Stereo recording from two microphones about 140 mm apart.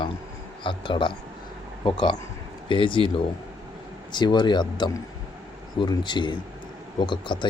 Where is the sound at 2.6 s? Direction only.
35° left (ahead or behind).